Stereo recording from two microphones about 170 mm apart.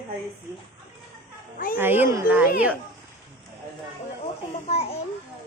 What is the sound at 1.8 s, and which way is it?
Speech, 10° right (ahead or behind).